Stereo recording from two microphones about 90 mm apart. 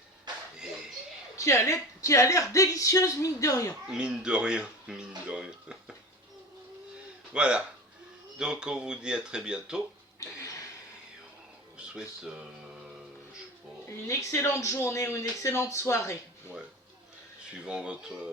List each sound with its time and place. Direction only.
1.4 s speech: 35° left (ahead or behind)
3.8 s speech: 10° right (ahead or behind)
6.9 s a sound: 10° right (ahead or behind)
8.4 s speech: 10° right (ahead or behind)
10.2 s a sound: 40° left (ahead or behind)
11.8 s speech: 10° right (ahead or behind)
14.1 s speech: 35° left (ahead or behind)
17.6 s speech: 10° right (ahead or behind)